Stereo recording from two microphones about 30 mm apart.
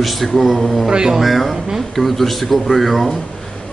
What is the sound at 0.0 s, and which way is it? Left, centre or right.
Speech, centre.